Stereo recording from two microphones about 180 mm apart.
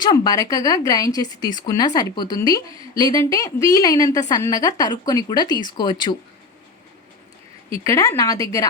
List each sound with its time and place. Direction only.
0.0 s a woman's voice: 20° left (ahead or behind)
7.9 s a woman's voice: 15° left (ahead or behind)